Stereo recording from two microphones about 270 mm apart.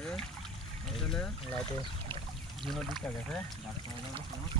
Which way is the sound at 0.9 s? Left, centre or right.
Centre.